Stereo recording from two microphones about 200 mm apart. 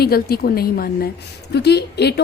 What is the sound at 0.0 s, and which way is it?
A woman's voice, 50° left (ahead or behind).